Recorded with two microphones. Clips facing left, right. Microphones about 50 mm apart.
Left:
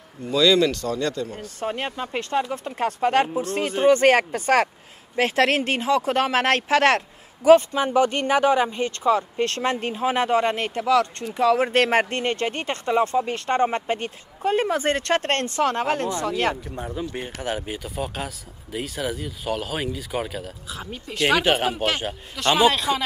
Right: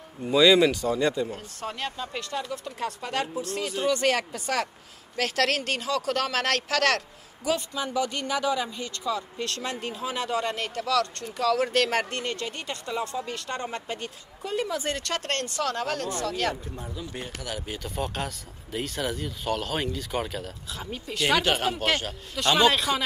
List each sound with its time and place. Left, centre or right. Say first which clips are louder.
0.3 s speech: even; centre
1.6 s speech: left 6 dB; left
5.1 s speech: left 6 dB; left
17.6 s speech: left 2 dB; centre